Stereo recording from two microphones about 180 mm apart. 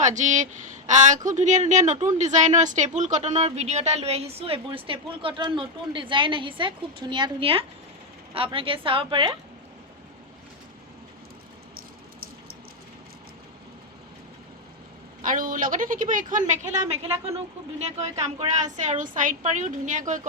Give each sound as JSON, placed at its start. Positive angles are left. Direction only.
{"t": 0.0, "sound": "a woman's voice", "side_deg": -40}
{"t": 15.2, "sound": "a woman's voice", "side_deg": -50}